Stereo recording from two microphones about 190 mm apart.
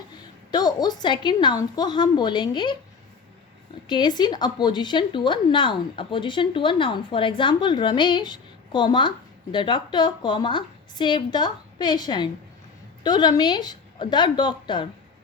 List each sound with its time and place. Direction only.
0.5 s speech: 20° left (ahead or behind)
3.8 s speech: 25° left (ahead or behind)